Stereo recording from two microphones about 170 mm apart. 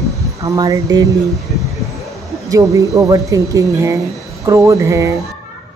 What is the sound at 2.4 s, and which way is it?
Speech, 20° right (ahead or behind).